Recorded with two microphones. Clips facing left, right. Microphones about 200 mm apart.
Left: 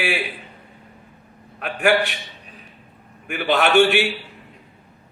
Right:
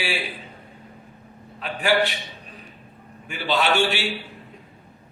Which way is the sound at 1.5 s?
55° left (ahead or behind).